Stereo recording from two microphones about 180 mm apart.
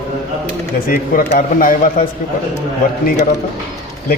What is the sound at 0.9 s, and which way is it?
A man's voice, 50° left (ahead or behind).